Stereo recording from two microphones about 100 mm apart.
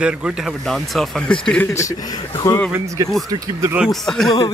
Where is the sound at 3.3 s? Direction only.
30° right (ahead or behind).